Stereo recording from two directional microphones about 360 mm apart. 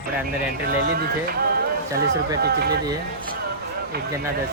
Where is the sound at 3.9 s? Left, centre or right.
Right.